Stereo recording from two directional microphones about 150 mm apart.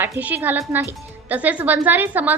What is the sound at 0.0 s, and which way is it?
Speech, 10° right (ahead or behind).